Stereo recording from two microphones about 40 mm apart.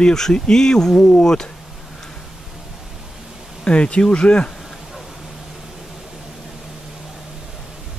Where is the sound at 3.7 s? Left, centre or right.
Left.